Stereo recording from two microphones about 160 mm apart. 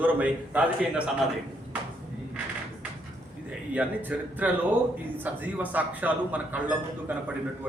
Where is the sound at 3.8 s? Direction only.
10° right (ahead or behind).